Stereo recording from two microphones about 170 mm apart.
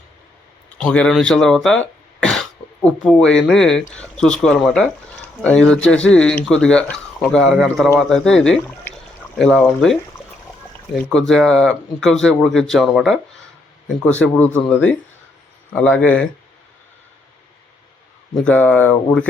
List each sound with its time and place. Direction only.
0.8 s speech: 5° left (ahead or behind)
14.2 s speech: 10° left (ahead or behind)
15.7 s speech: 5° left (ahead or behind)
18.3 s speech: 10° left (ahead or behind)